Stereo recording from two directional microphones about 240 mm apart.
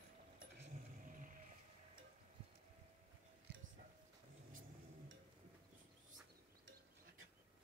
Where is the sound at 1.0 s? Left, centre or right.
Right.